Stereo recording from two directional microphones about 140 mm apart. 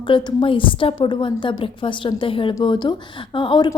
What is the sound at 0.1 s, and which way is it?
A woman's voice, 35° left (ahead or behind).